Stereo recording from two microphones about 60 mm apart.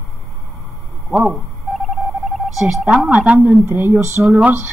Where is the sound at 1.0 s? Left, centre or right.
Centre.